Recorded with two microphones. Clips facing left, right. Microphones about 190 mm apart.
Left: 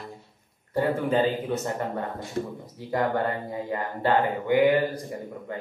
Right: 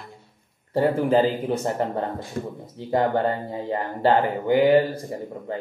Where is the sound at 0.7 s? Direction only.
30° right (ahead or behind).